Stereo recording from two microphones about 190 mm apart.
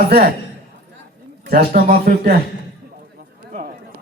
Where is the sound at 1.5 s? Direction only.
50° right (ahead or behind).